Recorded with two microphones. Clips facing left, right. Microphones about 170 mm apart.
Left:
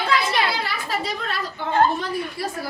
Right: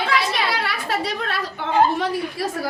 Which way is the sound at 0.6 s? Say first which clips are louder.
Right 2 dB; 75° right (ahead or behind).